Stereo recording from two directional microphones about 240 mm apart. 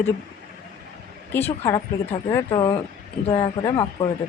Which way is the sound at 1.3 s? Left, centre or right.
Centre.